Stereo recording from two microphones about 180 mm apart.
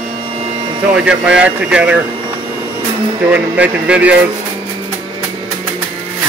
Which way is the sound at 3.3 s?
10° right (ahead or behind).